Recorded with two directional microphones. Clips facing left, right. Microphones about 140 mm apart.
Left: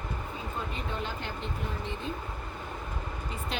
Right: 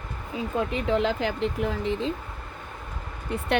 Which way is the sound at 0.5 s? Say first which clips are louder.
Right 12 dB; 90° right.